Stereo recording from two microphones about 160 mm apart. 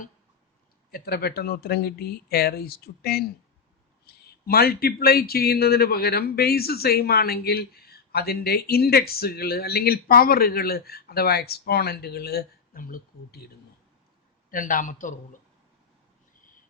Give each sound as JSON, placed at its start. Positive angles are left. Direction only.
{"t": 0.9, "sound": "a man's voice", "side_deg": 75}
{"t": 14.5, "sound": "a man's voice", "side_deg": 55}